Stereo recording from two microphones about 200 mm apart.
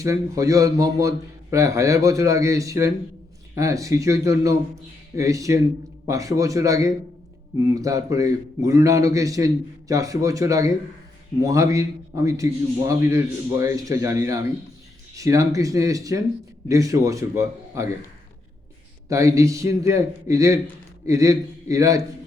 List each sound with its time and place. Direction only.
0.0 s a man's voice: 15° right (ahead or behind)
19.0 s a man's voice: 15° right (ahead or behind)